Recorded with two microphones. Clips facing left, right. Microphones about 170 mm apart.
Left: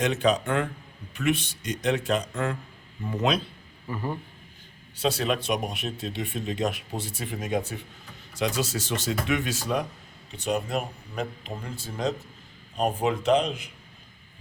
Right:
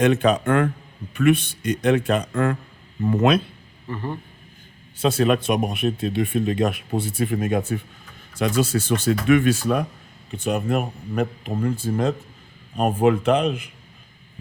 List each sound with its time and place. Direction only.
0.0 s speech: 55° right (ahead or behind)
3.8 s a man's voice: 10° left (ahead or behind)
4.9 s speech: 50° right (ahead or behind)